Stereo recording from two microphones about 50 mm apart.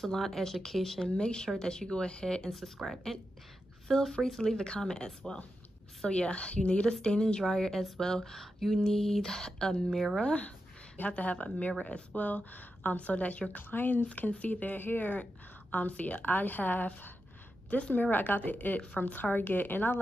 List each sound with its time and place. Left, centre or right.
0.0 s speech: centre
1.1 s a woman's voice: centre
9.8 s speech: centre
10.2 s a woman's voice: left
18.1 s speech: left